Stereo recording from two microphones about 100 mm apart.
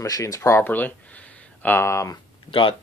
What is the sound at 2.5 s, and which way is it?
Speech, 55° left (ahead or behind).